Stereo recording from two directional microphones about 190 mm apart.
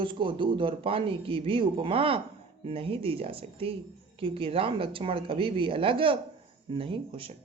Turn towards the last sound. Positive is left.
turn(degrees=-30)  # may be behind; listen again after turning